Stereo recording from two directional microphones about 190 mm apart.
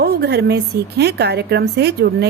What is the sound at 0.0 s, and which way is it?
A woman's voice, 60° right (ahead or behind).